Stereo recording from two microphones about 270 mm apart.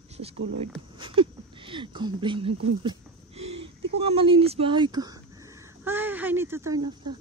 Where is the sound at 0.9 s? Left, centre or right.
Centre.